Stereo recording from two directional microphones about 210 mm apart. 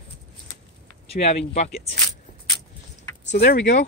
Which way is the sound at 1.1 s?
30° left (ahead or behind).